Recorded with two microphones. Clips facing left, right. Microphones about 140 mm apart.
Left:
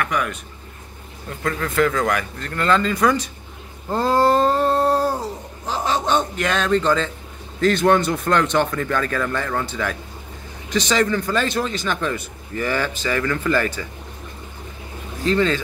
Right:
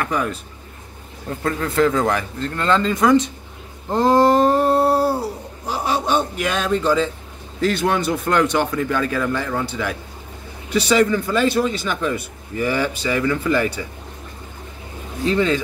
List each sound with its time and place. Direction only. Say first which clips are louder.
0.0 s speech: right 1 dB; 30° right (ahead or behind)
1.4 s speech: right 2 dB; 30° right (ahead or behind)
3.9 s humming: right 3 dB; 15° right (ahead or behind)
7.6 s a man's voice: left 3 dB; 5° right (ahead or behind)
15.2 s a man's voice: right 1 dB; 15° right (ahead or behind)